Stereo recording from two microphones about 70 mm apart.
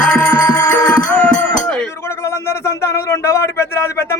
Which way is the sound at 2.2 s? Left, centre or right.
Left.